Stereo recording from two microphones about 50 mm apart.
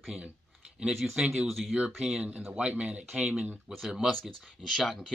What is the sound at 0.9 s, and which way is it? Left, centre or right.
Speech, centre.